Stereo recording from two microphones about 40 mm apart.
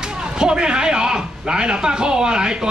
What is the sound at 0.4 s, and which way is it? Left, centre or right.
A man's voice, right.